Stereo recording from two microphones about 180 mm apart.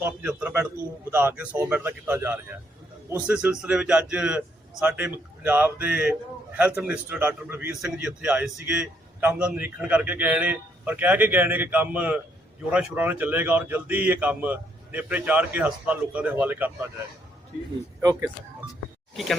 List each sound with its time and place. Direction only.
0.0 s a man's voice: 10° right (ahead or behind)
18.0 s speech: 20° right (ahead or behind)
19.1 s speech: centre (ahead or behind)